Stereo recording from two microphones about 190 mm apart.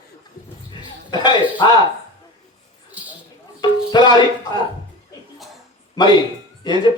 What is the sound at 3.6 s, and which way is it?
Music, 25° left (ahead or behind).